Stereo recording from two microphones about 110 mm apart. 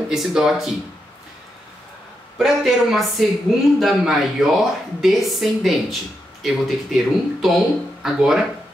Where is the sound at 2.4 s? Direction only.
Centre (ahead or behind).